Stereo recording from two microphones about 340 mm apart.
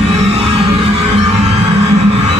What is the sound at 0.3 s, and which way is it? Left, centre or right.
Music, centre.